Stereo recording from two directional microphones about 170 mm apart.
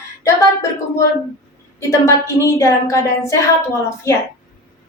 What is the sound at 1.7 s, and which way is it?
A woman's voice, 15° left (ahead or behind).